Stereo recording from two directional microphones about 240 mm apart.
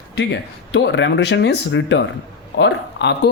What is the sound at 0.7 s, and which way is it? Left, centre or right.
Speech, left.